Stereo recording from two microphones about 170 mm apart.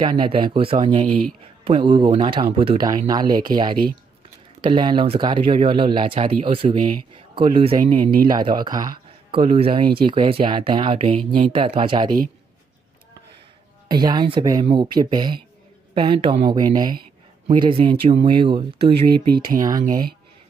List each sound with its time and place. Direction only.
0.0 s speech: 25° right (ahead or behind)
13.8 s a man's voice: 25° right (ahead or behind)
18.8 s speech: 65° right (ahead or behind)